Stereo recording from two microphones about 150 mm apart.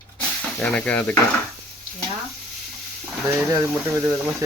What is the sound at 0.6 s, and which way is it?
Stir, 10° left (ahead or behind).